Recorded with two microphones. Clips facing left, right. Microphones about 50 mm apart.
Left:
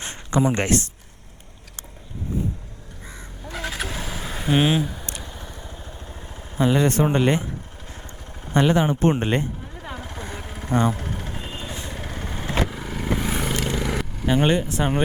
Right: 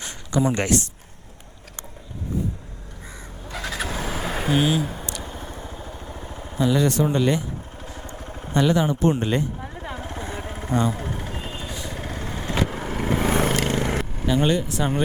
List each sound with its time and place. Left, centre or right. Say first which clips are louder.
0.0 s a sound: left 1 dB; left
3.6 s vehicle: even; left
3.8 s vehicle: right 3 dB; right
4.5 s speech: left 2 dB; left
4.8 s speech: left 1 dB; right
5.2 s vehicle: right 3 dB; right
6.6 s speech: left 1 dB; left
8.0 s vehicle: right 4 dB; right
8.5 s speech: left 1 dB; left
9.8 s vehicle: right 1 dB; centre
12.6 s vehicle: right 2 dB; centre
13.4 s vehicle: right 4 dB; right
13.7 s vehicle: right 2 dB; right
14.3 s speech: left 1 dB; left